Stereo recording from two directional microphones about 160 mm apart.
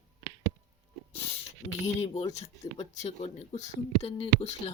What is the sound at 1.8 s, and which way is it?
Speech, 40° left (ahead or behind).